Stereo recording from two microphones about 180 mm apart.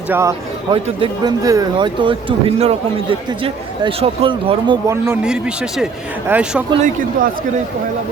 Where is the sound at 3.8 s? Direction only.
30° right (ahead or behind).